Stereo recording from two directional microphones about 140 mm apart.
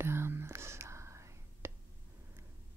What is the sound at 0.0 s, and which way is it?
Whispering, 15° right (ahead or behind).